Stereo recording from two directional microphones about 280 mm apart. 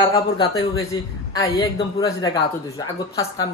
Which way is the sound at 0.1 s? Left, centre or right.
Centre.